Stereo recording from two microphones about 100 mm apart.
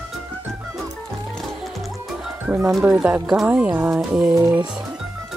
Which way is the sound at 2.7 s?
5° right (ahead or behind).